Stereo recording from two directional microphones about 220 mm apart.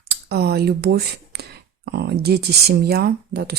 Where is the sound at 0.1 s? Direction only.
45° right (ahead or behind).